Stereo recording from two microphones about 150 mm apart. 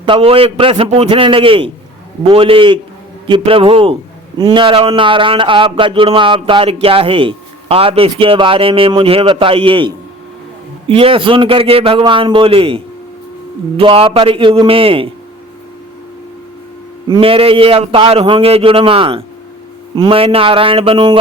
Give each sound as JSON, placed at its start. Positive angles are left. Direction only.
{"t": 0.0, "sound": "speech", "side_deg": -35}
{"t": 17.1, "sound": "speech", "side_deg": -40}